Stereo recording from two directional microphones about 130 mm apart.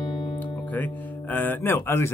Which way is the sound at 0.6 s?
15° left (ahead or behind).